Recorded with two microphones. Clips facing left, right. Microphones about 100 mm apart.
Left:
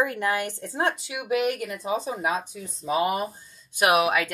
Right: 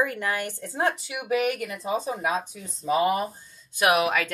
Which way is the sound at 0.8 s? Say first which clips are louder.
Right 1 dB; centre (ahead or behind).